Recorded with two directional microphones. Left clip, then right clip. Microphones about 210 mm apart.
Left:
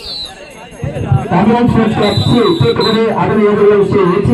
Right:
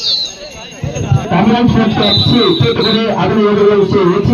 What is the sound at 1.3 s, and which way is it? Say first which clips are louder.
Speech: left 1 dB; 45° right (ahead or behind).